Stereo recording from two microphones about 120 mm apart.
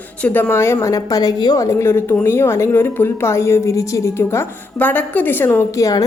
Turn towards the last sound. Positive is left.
turn(degrees=30)  # may be behind; listen again after turning